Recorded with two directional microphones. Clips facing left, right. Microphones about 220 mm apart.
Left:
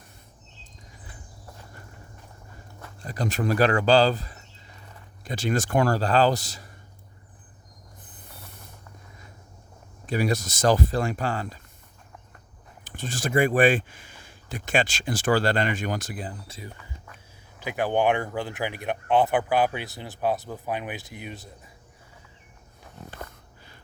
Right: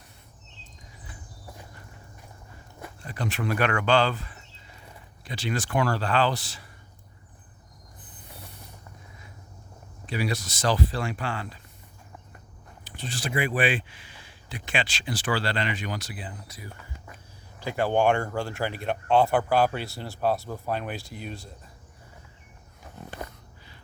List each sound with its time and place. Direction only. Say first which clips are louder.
3.0 s speech: left 4 dB; 40° left (ahead or behind)
10.1 s speech: left 4 dB; 45° left (ahead or behind)
12.8 s speech: left 3 dB; 45° left (ahead or behind)
16.5 s speech: left 4 dB; 30° left (ahead or behind)
17.6 s speech: even; 15° left (ahead or behind)
18.1 s speech: even; 5° left (ahead or behind)
18.3 s speech: even; 15° left (ahead or behind)